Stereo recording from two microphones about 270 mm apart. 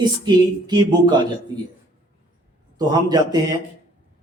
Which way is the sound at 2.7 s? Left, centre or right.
Centre.